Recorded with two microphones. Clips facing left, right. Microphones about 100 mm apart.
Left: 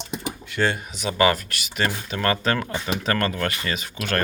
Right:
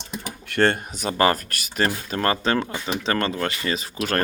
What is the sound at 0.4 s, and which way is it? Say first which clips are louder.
Speech: right 4 dB; 60° right (ahead or behind).